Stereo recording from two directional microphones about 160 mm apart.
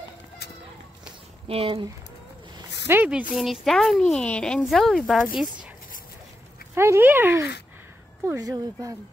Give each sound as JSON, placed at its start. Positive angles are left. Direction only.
{"t": 1.5, "sound": "speech", "side_deg": -35}
{"t": 2.9, "sound": "speech", "side_deg": -10}
{"t": 6.7, "sound": "speech", "side_deg": -15}